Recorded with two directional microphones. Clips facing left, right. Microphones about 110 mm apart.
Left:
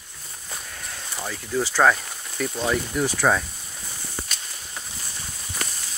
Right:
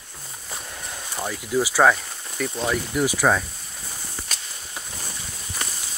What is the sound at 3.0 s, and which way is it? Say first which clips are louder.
Speech: right 1 dB; 5° right (ahead or behind).